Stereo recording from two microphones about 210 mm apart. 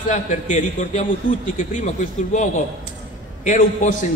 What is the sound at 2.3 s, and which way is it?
A man's voice, 35° left (ahead or behind).